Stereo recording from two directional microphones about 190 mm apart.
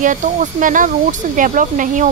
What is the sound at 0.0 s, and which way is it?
Speech, 40° right (ahead or behind).